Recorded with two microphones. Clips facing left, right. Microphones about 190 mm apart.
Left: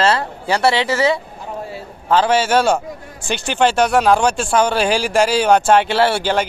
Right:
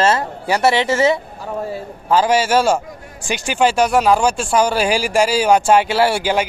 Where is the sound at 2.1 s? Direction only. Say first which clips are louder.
Even; 10° right (ahead or behind).